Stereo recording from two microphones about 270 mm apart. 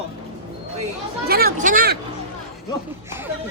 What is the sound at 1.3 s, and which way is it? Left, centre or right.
Speech, right.